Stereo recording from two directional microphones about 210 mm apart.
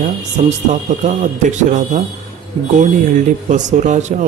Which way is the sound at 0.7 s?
35° right (ahead or behind).